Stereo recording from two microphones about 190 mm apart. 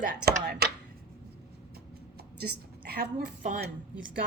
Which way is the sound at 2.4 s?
55° right (ahead or behind).